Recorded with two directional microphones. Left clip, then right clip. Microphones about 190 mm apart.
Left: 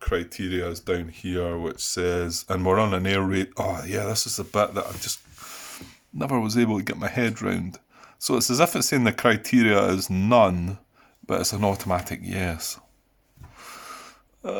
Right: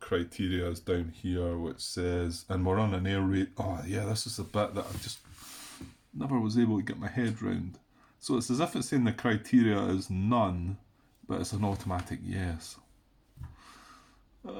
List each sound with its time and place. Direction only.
0.0 s speech: 20° left (ahead or behind); by 5.1 s 40° left (ahead or behind)
6.1 s speech: 50° left (ahead or behind)
13.6 s a sound: 50° left (ahead or behind)